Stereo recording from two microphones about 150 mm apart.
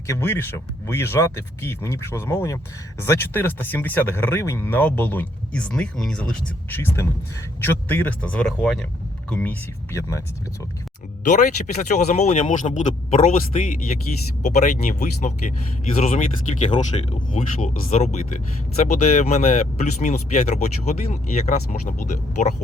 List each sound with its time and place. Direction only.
0.1 s speech: 15° left (ahead or behind)
11.2 s speech: 55° left (ahead or behind)